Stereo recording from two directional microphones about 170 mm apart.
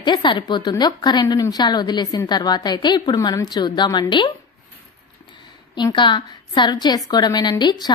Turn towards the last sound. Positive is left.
turn(degrees=25)  # may be behind; listen again after turning